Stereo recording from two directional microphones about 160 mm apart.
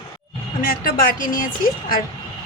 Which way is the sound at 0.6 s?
65° left (ahead or behind).